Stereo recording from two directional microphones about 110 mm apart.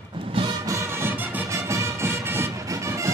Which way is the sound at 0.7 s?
25° right (ahead or behind).